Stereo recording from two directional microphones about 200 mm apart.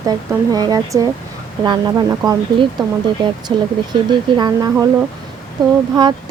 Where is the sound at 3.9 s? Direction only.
20° right (ahead or behind).